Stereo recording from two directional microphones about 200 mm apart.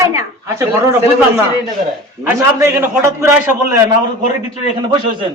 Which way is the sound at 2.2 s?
10° right (ahead or behind).